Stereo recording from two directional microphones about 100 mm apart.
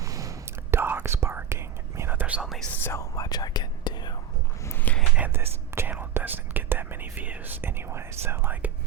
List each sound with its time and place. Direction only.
0.0 s whispering: 35° right (ahead or behind)
0.8 s whispering: 20° right (ahead or behind)
2.8 s whispering: 30° left (ahead or behind)
4.6 s a sound: 20° left (ahead or behind)
5.1 s whispering: 20° right (ahead or behind)